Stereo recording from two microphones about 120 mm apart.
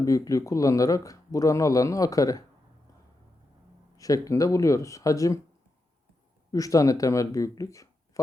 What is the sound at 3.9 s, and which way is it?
Speech, 30° left (ahead or behind).